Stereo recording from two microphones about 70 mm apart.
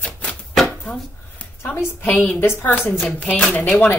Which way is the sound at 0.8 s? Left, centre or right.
Centre.